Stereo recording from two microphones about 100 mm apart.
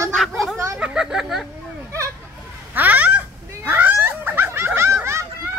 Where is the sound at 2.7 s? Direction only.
15° right (ahead or behind).